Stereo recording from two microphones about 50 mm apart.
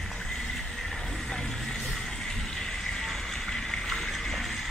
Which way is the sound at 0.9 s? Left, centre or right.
Centre.